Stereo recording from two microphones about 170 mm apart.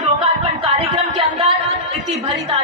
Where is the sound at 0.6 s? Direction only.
35° right (ahead or behind).